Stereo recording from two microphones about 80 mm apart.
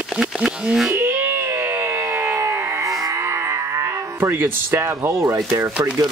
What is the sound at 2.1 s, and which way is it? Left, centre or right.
Music, right.